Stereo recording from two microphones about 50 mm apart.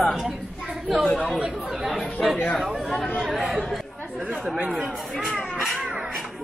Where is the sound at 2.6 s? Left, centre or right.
Centre.